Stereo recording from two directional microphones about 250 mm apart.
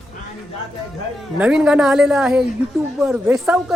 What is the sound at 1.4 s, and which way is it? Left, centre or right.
A woman's voice, centre.